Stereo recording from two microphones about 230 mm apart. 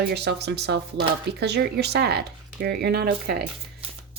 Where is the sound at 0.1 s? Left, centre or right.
Right.